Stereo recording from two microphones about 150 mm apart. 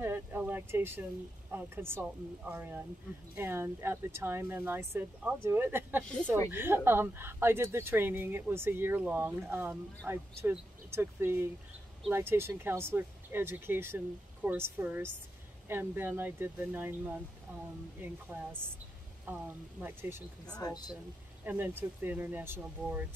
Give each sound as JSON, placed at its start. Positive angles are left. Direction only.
{"t": 0.0, "sound": "a sound", "side_deg": -15}
{"t": 1.5, "sound": "speech", "side_deg": -15}
{"t": 20.4, "sound": "speech", "side_deg": 25}
{"t": 21.5, "sound": "speech", "side_deg": -10}